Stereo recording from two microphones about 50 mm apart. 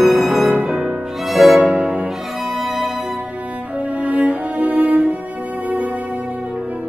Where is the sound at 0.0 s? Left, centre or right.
Centre.